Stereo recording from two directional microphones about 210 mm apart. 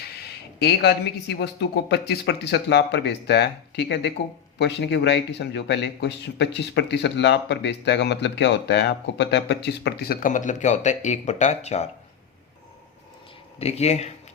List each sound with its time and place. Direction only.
0.6 s a man's voice: 50° left (ahead or behind); by 11.9 s 30° left (ahead or behind)
13.6 s speech: 30° left (ahead or behind)